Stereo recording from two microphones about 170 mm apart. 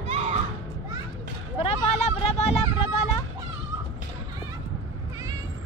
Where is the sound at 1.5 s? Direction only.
35° left (ahead or behind).